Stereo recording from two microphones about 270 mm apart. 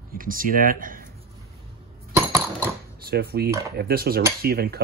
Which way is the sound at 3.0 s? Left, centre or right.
Right.